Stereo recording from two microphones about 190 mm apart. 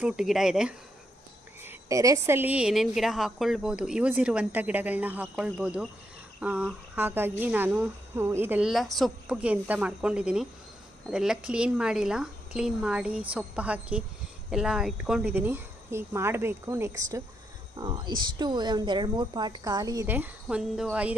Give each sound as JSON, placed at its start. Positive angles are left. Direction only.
{"t": 0.0, "sound": "a woman's voice", "side_deg": -5}
{"t": 1.6, "sound": "a woman's voice", "side_deg": -15}